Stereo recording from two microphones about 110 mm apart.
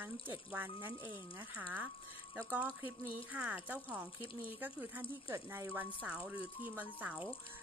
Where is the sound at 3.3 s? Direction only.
15° right (ahead or behind).